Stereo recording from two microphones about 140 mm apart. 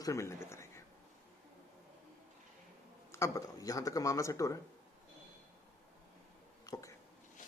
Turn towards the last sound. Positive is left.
turn(degrees=25)  # may be behind; listen again after turning